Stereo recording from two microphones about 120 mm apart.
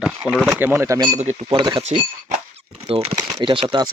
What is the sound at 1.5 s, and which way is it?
Speech, 45° right (ahead or behind).